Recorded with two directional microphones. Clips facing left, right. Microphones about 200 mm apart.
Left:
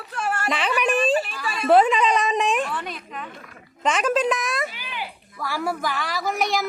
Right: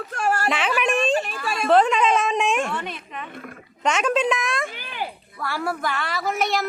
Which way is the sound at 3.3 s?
55° right (ahead or behind).